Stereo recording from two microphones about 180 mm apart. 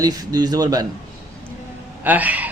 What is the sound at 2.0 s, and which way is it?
Speech, 10° right (ahead or behind).